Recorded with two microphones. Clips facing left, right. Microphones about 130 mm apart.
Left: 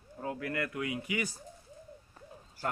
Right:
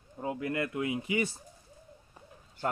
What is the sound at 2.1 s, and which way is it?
Bird, 20° right (ahead or behind).